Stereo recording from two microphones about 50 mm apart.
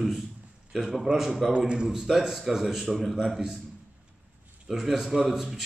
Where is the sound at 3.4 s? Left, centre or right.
Centre.